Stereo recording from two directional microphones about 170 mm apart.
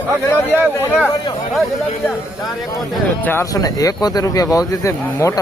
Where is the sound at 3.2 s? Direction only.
15° left (ahead or behind).